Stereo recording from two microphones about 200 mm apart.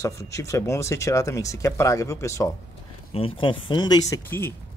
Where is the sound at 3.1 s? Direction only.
25° left (ahead or behind); by 4.5 s 10° left (ahead or behind).